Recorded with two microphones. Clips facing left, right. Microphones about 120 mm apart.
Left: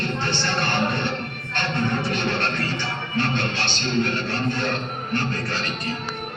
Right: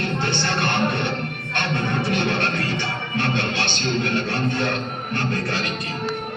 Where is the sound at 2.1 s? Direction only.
60° right (ahead or behind).